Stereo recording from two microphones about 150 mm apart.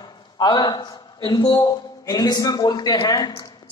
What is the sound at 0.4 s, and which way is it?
A man's voice, 30° left (ahead or behind).